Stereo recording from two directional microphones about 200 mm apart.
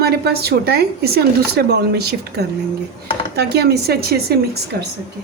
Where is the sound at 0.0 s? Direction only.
55° right (ahead or behind).